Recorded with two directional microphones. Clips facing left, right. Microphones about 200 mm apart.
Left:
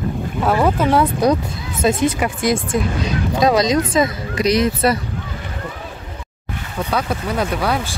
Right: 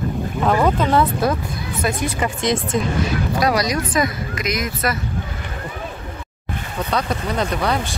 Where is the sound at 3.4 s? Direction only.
20° left (ahead or behind).